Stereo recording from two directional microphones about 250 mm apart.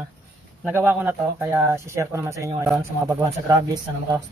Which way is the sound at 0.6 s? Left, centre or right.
Centre.